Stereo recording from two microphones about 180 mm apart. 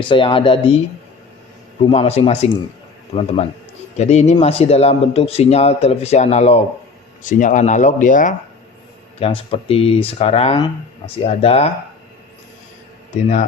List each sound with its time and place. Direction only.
0.0 s speech: 25° left (ahead or behind)
1.9 s speech: 35° left (ahead or behind)
3.9 s speech: 35° left (ahead or behind)
9.1 s speech: 30° left (ahead or behind)
13.2 s speech: 40° left (ahead or behind)